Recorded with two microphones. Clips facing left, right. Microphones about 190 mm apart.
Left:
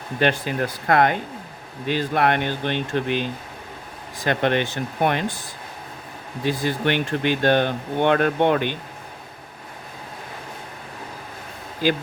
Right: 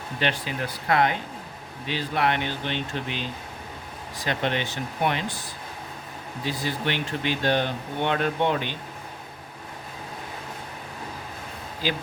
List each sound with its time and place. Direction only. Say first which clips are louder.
0.2 s speech: left 7 dB; 50° left (ahead or behind)
6.4 s speech: left 6 dB; 55° left (ahead or behind)
11.8 s speech: left 7 dB; 50° left (ahead or behind)